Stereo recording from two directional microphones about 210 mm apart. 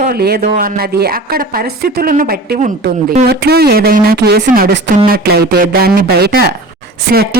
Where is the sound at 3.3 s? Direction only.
50° right (ahead or behind).